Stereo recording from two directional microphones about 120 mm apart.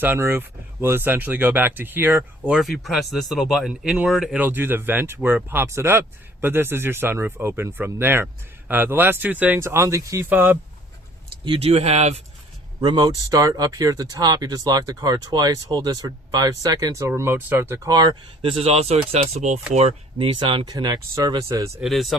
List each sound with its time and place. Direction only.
0.0 s speech: 15° right (ahead or behind)
2.6 s speech: centre (ahead or behind)
4.4 s speech: 15° right (ahead or behind)
11.6 s speech: 60° right (ahead or behind)
12.8 s speech: 40° right (ahead or behind); by 17.7 s 20° right (ahead or behind)
17.8 s speech: 35° right (ahead or behind)
18.4 s speech: 55° right (ahead or behind); by 19.5 s 70° right (ahead or behind)
20.1 s speech: 45° right (ahead or behind)
20.7 s speech: 30° right (ahead or behind)
21.8 s speech: centre (ahead or behind)